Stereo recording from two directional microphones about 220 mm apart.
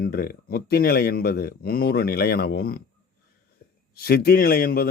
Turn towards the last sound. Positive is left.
turn(degrees=40)  # may be behind; listen again after turning